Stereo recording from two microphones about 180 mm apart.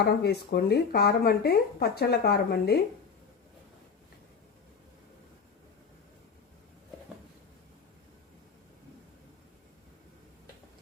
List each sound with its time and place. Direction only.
0.0 s speech: 60° left (ahead or behind)